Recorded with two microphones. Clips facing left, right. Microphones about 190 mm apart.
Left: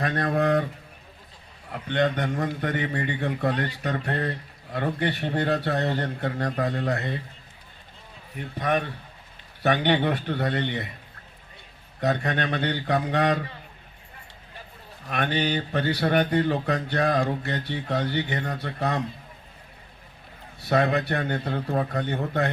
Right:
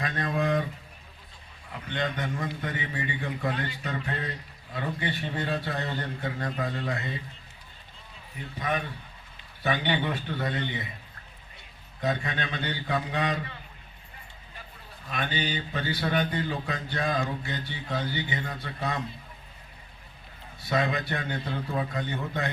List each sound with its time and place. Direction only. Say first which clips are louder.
0.0 s speech: left 5 dB; 65° left (ahead or behind)
1.7 s speech: left 7 dB; 65° left (ahead or behind)
8.5 s speech: left 5 dB; 65° left (ahead or behind)
11.9 s speech: left 5 dB; 65° left (ahead or behind)
15.1 s speech: left 6 dB; 65° left (ahead or behind)
20.7 s speech: left 5 dB; 65° left (ahead or behind)